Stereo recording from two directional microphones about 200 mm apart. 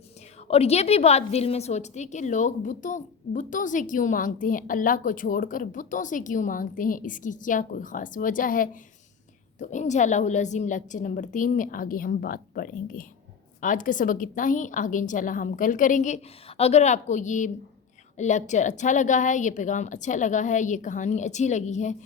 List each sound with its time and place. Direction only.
0.4 s a woman's voice: 30° left (ahead or behind)